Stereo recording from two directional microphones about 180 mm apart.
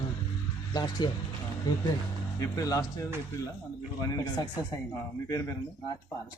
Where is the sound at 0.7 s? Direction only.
20° left (ahead or behind).